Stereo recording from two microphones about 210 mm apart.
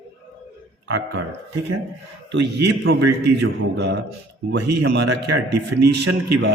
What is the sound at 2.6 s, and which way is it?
A man's voice, 50° right (ahead or behind).